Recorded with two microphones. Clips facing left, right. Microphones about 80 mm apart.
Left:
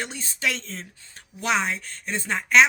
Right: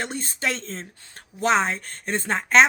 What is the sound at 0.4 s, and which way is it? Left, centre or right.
Speech, right.